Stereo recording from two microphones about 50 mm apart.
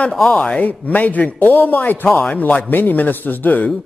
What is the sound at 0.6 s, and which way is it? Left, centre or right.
A man's voice, left.